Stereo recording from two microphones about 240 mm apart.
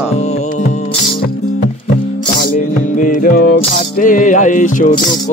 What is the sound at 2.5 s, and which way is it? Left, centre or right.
Music, left.